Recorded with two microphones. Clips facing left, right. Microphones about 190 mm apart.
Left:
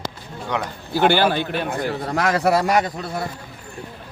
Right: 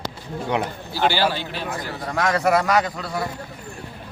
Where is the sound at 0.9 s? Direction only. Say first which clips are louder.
Left 5 dB; 55° left (ahead or behind).